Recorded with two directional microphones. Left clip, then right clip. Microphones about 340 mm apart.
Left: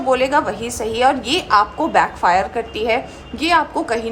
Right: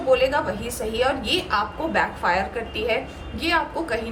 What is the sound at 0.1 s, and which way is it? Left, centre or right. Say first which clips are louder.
A woman's voice: left 4 dB; centre.